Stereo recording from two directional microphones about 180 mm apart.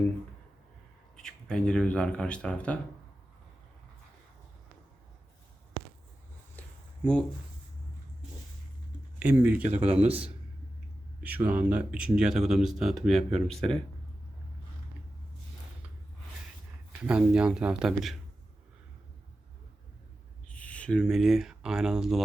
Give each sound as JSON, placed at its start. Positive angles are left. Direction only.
{"t": 1.1, "sound": "speech", "side_deg": 5}
{"t": 6.6, "sound": "a sound", "side_deg": 5}
{"t": 9.1, "sound": "speech", "side_deg": -10}
{"t": 9.6, "sound": "speech", "side_deg": -40}
{"t": 11.2, "sound": "speech", "side_deg": -10}
{"t": 17.0, "sound": "speech", "side_deg": -5}
{"t": 20.5, "sound": "speech", "side_deg": 5}